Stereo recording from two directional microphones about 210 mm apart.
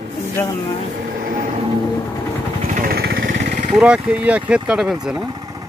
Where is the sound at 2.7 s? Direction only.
45° right (ahead or behind).